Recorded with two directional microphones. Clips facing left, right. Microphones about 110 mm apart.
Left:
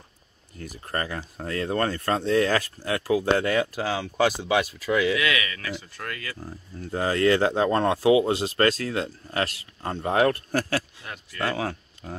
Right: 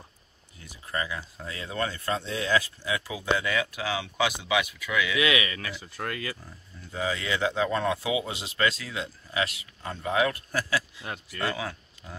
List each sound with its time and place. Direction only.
0.6 s speech: 55° left (ahead or behind)
5.1 s speech: 20° right (ahead or behind)
6.9 s speech: 55° left (ahead or behind)